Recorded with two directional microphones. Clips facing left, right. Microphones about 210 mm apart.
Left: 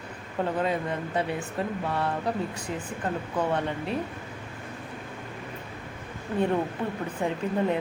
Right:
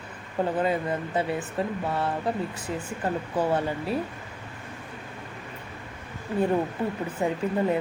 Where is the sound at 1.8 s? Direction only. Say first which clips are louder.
Right 1 dB; centre (ahead or behind).